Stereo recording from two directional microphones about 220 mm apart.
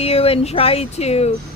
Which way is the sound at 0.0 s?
25° left (ahead or behind).